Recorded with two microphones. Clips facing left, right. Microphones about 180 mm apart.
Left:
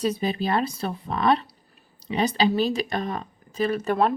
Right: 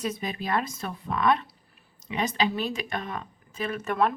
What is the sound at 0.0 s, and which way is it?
A woman's voice, 30° left (ahead or behind).